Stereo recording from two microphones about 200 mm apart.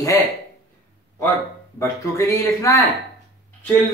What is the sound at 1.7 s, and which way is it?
Speech, 15° left (ahead or behind).